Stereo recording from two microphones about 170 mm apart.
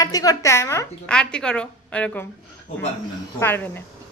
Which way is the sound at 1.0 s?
5° left (ahead or behind).